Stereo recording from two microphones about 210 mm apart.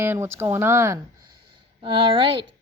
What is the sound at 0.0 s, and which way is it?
Speech, 10° right (ahead or behind).